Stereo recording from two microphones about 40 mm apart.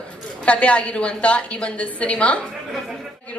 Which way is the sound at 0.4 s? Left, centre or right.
Left.